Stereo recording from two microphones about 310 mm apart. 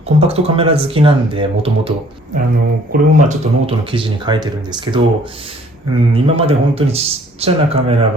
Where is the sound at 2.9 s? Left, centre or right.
Right.